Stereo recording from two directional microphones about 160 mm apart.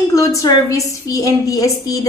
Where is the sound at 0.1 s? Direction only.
20° left (ahead or behind).